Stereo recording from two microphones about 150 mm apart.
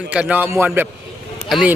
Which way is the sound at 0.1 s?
10° right (ahead or behind).